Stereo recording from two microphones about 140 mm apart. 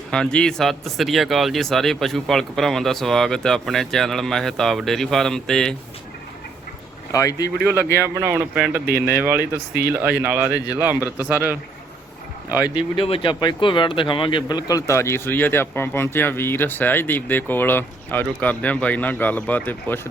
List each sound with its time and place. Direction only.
0.1 s speech: 5° left (ahead or behind)
7.1 s speech: 25° left (ahead or behind)
8.0 s a man's voice: 20° right (ahead or behind)
8.5 s a man's voice: 5° right (ahead or behind)
13.0 s speech: 40° left (ahead or behind); by 20.0 s 10° left (ahead or behind)